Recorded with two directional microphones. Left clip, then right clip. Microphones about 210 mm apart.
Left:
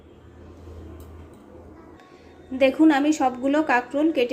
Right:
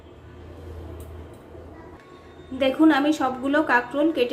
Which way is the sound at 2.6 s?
25° left (ahead or behind).